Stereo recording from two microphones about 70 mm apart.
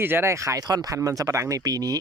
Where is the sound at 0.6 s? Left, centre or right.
Right.